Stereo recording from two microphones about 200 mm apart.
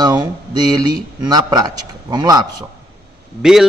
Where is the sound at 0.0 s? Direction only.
20° right (ahead or behind).